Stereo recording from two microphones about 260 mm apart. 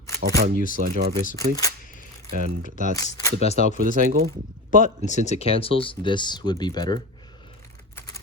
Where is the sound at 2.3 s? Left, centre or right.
Right.